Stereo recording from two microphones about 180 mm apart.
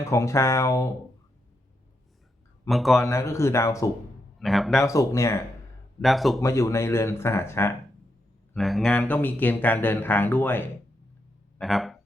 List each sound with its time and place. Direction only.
0.0 s speech: 15° left (ahead or behind)
2.6 s speech: centre (ahead or behind)
3.0 s speech: 15° left (ahead or behind)
4.4 s speech: centre (ahead or behind)
4.8 s speech: 15° left (ahead or behind)
6.0 s speech: centre (ahead or behind)
6.4 s speech: 15° left (ahead or behind)
8.5 s speech: centre (ahead or behind)
11.6 s speech: centre (ahead or behind)